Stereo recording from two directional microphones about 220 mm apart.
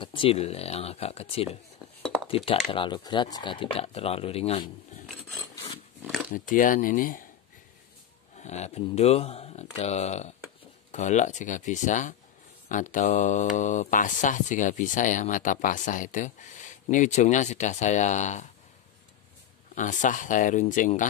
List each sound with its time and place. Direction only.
0.0 s speech: 25° left (ahead or behind)
6.3 s mantra: 40° left (ahead or behind)
8.4 s speech: 30° left (ahead or behind)
10.9 s mantra: 35° left (ahead or behind)
19.7 s mantra: 35° left (ahead or behind)